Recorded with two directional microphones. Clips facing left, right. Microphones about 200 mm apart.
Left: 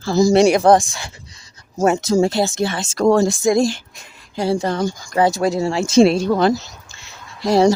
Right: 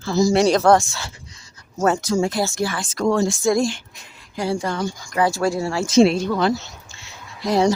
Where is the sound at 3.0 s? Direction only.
40° left (ahead or behind).